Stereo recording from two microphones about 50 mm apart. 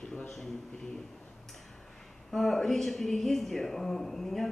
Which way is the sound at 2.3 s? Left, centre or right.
Centre.